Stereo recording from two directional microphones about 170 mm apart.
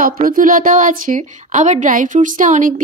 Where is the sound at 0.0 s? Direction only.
50° right (ahead or behind).